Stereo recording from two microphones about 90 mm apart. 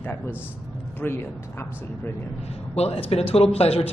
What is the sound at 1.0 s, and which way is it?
Speech, 25° left (ahead or behind).